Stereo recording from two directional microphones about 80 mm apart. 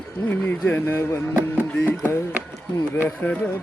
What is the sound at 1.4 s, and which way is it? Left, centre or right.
Music, right.